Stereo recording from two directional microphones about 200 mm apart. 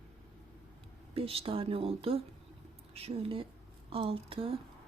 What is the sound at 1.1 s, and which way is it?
Speech, 30° right (ahead or behind).